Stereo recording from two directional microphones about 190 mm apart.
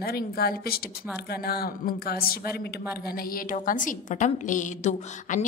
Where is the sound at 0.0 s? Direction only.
55° left (ahead or behind).